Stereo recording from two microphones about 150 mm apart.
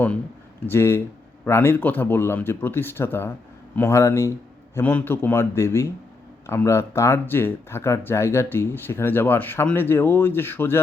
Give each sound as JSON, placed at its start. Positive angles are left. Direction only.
{"t": 0.7, "sound": "speech", "side_deg": 15}